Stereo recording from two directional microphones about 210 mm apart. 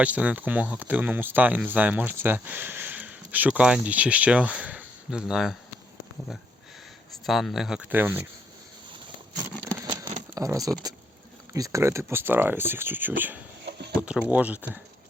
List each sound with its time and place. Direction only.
0.0 s speech: 5° right (ahead or behind)
7.3 s speech: centre (ahead or behind)
9.7 s a sound: 15° right (ahead or behind)
10.3 s speech: 15° right (ahead or behind)
13.7 s a sound: 55° right (ahead or behind)
14.0 s speech: 5° right (ahead or behind)